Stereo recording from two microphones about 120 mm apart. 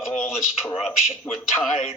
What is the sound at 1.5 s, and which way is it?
Speech, 25° left (ahead or behind).